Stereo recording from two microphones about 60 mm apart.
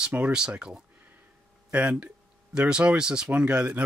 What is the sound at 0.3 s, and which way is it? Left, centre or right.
Speech, centre.